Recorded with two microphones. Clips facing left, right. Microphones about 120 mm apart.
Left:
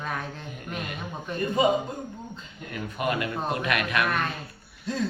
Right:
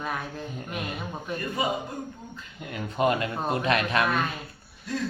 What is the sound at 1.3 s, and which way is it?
Speech, 5° right (ahead or behind).